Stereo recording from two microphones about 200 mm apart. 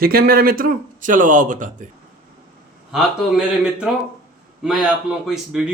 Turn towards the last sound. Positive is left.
turn(degrees=-5)  # may be behind; listen again after turning